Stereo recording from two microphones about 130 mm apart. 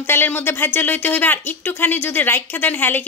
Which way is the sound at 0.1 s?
15° left (ahead or behind).